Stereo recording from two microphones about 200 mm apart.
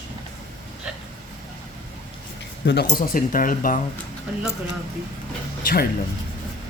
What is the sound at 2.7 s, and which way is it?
Speech, 50° left (ahead or behind).